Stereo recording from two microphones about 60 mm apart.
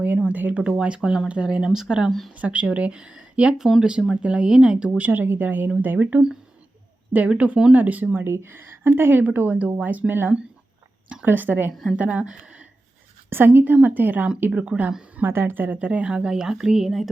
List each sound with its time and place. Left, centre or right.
0.2 s speech: right; by 2.0 s centre
2.0 s speech: centre
2.3 s speech: right
8.2 s a woman's voice: right
11.7 s speech: centre
11.9 s speech: right
13.3 s a woman's voice: right
15.3 s speech: right; by 17.1 s centre